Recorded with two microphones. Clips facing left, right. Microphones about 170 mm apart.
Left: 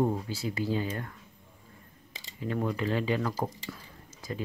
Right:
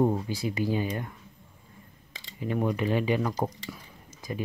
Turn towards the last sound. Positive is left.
turn(degrees=-15)  # may be behind; listen again after turning